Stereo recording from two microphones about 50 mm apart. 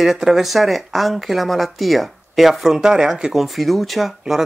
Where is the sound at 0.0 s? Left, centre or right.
Centre.